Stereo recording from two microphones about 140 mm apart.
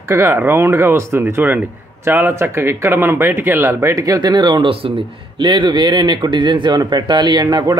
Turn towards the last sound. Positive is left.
turn(degrees=-30)  # may be behind; listen again after turning